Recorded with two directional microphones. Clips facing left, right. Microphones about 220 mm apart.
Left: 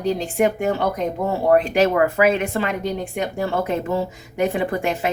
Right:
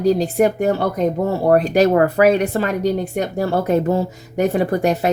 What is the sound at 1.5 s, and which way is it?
Speech, 40° right (ahead or behind).